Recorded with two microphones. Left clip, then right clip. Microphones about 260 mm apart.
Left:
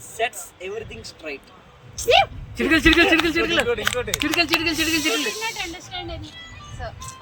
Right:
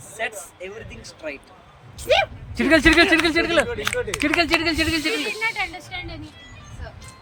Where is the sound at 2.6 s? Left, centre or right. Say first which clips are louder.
Right 1 dB; centre.